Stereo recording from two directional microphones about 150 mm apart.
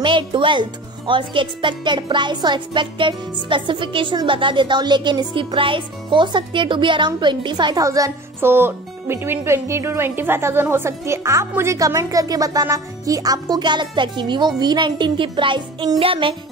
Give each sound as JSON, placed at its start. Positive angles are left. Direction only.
{"t": 0.0, "sound": "speech", "side_deg": -35}